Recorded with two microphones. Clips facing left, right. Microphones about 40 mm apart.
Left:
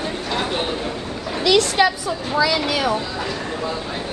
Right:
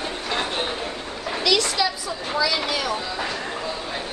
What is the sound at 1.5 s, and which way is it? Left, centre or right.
Speech, left.